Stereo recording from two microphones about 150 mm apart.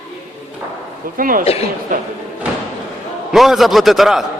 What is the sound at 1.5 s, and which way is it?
Speech, 40° left (ahead or behind).